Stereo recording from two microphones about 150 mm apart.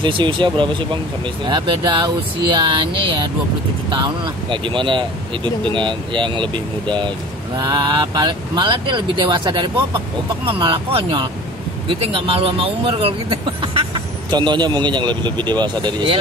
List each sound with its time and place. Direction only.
0.0 s speech: 35° right (ahead or behind)